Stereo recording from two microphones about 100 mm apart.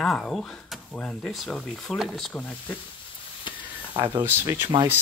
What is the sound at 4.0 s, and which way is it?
Speech, 20° right (ahead or behind).